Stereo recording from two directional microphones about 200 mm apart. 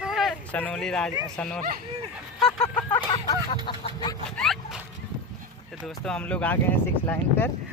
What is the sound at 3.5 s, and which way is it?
Duck, 25° left (ahead or behind).